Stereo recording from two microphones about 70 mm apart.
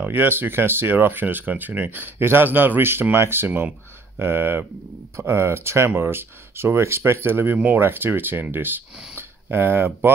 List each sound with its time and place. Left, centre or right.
0.0 s speech: right
7.5 s speech: right